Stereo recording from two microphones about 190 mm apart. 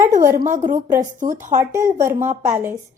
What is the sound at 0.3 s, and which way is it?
Speech, 40° right (ahead or behind).